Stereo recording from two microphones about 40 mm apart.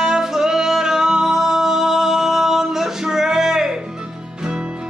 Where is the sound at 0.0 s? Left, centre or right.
Centre.